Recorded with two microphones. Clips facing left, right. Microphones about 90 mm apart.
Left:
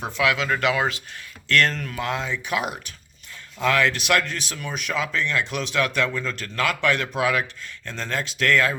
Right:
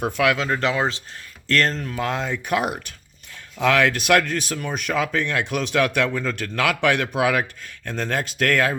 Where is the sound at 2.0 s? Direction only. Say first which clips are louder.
Right 2 dB; 50° right (ahead or behind).